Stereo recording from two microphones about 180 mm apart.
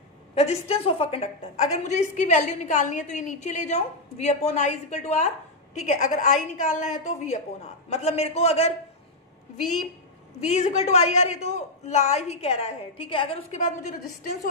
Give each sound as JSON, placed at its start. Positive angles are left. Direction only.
{"t": 0.3, "sound": "a woman's voice", "side_deg": 35}
{"t": 10.4, "sound": "a woman's voice", "side_deg": 35}